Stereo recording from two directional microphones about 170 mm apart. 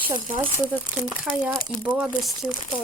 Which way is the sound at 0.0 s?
25° right (ahead or behind).